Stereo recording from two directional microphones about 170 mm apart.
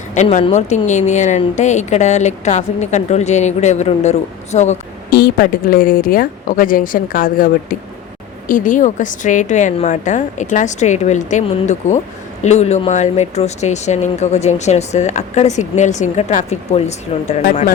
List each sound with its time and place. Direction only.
0.1 s a woman's voice: 45° left (ahead or behind)
5.1 s a woman's voice: 60° left (ahead or behind); by 17.3 s 40° left (ahead or behind)